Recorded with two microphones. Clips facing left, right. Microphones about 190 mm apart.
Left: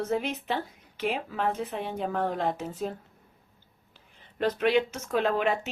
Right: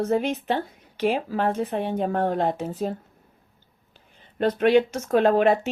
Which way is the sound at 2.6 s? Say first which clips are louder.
Right 5 dB; 40° right (ahead or behind).